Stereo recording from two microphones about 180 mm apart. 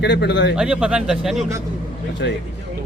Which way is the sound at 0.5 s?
5° right (ahead or behind).